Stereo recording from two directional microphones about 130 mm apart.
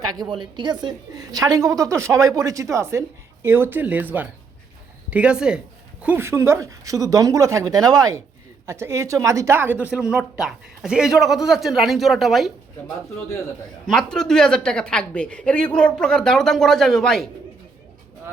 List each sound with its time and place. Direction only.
0.0 s a woman's voice: 30° right (ahead or behind); by 12.5 s centre (ahead or behind)
13.8 s speech: 5° left (ahead or behind)